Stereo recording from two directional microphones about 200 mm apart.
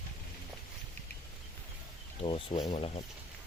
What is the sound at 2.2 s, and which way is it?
Speech, 25° left (ahead or behind).